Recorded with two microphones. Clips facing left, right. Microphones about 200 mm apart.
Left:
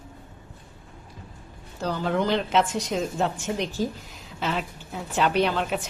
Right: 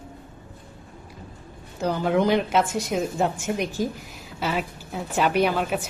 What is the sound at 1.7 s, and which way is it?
A woman's voice, 15° right (ahead or behind).